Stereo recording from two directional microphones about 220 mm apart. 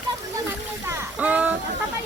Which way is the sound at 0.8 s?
10° right (ahead or behind).